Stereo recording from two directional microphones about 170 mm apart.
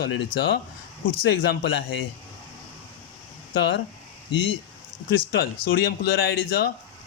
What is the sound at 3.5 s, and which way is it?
Speech, 80° left.